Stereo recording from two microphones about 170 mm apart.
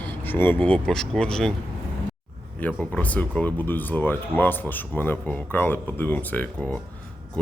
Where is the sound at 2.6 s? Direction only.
10° left (ahead or behind).